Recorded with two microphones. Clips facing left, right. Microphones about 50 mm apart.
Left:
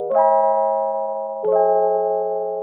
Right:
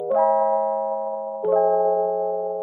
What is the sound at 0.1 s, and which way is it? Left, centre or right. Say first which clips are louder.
Music: left 3 dB; centre.